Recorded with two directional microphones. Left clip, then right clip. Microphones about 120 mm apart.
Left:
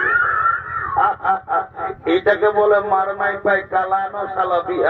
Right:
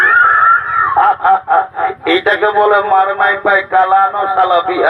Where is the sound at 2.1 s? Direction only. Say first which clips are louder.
Right 3 dB; centre (ahead or behind).